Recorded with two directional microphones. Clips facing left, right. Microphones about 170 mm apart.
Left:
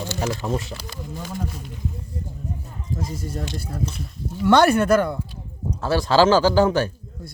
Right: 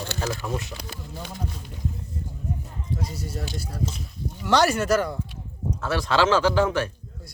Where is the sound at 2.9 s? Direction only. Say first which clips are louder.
Left 3 dB; 50° left (ahead or behind).